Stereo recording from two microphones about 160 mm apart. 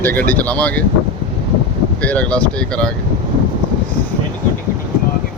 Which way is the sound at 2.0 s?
10° left (ahead or behind).